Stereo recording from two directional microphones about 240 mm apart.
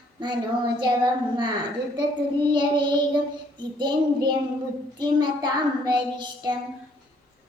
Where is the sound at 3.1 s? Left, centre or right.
Centre.